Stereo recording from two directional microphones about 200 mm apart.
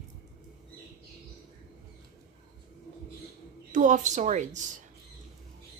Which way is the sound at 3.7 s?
40° right (ahead or behind).